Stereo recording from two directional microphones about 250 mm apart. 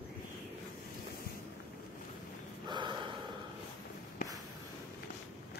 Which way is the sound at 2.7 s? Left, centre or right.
Centre.